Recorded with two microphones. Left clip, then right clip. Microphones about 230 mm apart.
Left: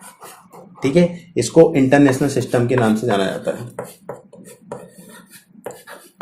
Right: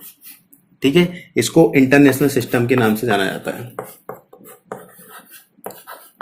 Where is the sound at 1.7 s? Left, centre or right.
Right.